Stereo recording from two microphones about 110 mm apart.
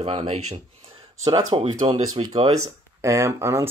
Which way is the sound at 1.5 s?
50° right (ahead or behind).